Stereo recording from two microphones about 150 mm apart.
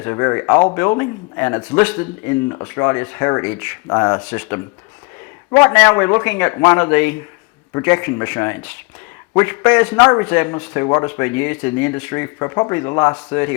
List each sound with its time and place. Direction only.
0.0 s speech: 20° left (ahead or behind)
5.6 s speech: 15° left (ahead or behind)
7.7 s speech: 20° left (ahead or behind)
7.9 s speech: 10° left (ahead or behind)
10.0 s a man's voice: 20° left (ahead or behind)
10.2 s speech: 10° left (ahead or behind)